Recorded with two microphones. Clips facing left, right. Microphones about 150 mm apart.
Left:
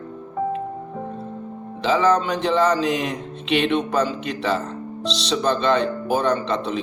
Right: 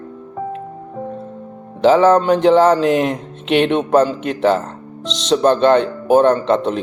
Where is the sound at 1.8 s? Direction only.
50° right (ahead or behind).